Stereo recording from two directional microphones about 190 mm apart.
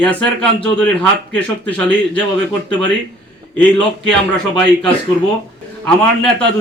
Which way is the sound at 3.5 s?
5° left (ahead or behind).